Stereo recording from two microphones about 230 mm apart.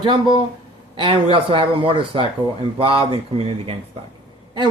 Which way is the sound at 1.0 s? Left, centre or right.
Right.